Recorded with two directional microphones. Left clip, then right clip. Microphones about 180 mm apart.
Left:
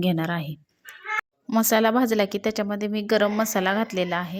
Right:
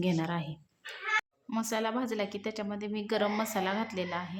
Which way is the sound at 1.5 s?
45° left (ahead or behind).